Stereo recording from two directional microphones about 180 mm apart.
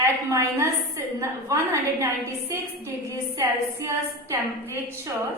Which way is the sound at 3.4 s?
15° right (ahead or behind).